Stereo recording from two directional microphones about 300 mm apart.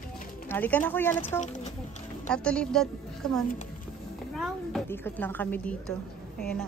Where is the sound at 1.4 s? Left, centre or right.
Left.